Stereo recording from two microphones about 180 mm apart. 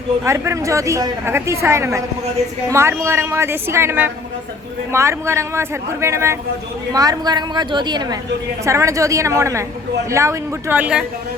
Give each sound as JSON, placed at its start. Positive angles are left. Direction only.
{"t": 0.3, "sound": "a man's voice", "side_deg": -15}